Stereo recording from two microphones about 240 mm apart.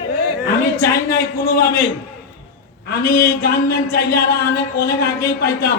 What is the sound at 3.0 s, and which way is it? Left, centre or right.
Speech, left.